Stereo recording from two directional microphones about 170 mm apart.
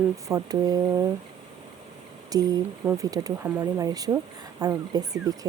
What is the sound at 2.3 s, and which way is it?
Speech, 20° right (ahead or behind).